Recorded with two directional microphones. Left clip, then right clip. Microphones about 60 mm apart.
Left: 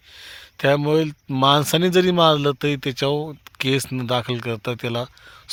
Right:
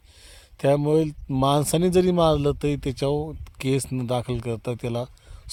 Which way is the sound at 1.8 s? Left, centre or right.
Centre.